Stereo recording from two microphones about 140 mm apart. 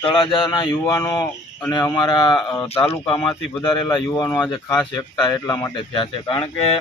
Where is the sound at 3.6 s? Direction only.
30° left (ahead or behind).